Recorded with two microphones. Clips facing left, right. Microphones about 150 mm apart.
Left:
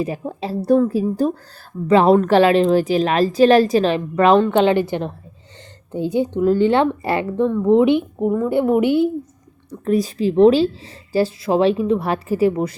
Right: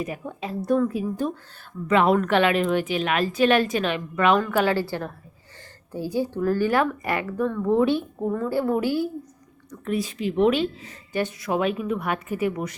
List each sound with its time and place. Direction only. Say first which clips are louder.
0.0 s a woman's voice: left 6 dB; 30° left (ahead or behind)
9.6 s a woman's voice: left 8 dB; 35° left (ahead or behind)